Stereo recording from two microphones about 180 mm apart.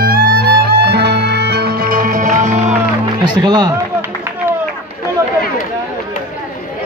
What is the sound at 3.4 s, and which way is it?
Music, 25° right (ahead or behind).